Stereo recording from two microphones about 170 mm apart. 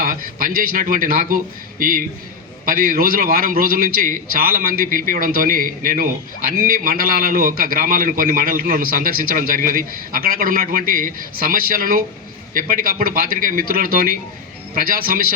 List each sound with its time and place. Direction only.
0.0 s a man's voice: 55° right (ahead or behind)